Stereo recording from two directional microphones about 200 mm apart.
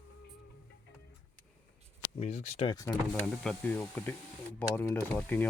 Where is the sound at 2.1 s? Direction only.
35° left (ahead or behind).